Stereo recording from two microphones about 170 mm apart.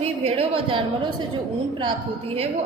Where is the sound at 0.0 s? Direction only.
35° right (ahead or behind).